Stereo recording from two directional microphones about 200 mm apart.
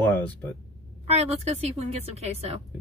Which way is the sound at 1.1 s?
30° right (ahead or behind).